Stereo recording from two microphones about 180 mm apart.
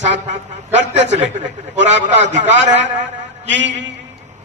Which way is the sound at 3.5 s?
85° right.